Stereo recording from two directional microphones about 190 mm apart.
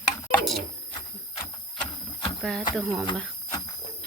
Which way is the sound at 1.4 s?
25° left (ahead or behind).